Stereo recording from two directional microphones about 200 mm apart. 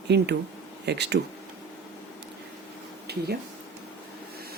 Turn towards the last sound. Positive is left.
turn(degrees=-55)  # may be behind; listen again after turning